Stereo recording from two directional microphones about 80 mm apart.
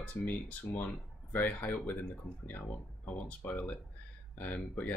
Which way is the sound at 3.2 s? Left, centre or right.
Centre.